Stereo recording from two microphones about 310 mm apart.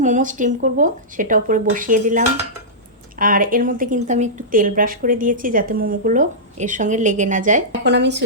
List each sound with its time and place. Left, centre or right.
0.0 s a woman's voice: right